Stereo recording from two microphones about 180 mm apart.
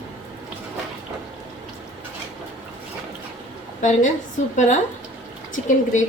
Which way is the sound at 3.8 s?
45° left (ahead or behind).